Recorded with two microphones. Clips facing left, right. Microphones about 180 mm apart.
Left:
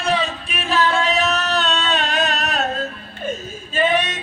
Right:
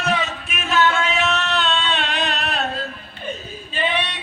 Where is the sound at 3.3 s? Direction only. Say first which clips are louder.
Left 3 dB; 45° left (ahead or behind).